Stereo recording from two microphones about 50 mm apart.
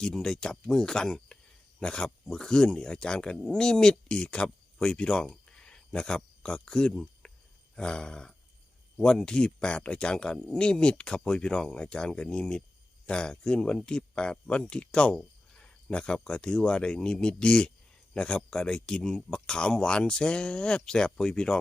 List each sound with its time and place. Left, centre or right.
0.0 s speech: centre
7.8 s roar: centre
9.0 s speech: centre